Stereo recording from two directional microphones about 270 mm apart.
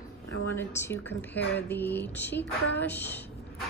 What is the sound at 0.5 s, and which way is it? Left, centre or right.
Speech, centre.